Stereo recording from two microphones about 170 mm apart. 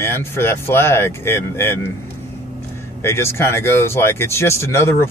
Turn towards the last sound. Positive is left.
turn(degrees=15)  # may be behind; listen again after turning